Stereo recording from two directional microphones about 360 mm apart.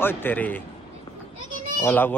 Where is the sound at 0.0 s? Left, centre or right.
Centre.